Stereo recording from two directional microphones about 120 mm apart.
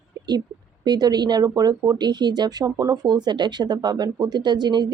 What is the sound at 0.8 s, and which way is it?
Speech, 35° right (ahead or behind).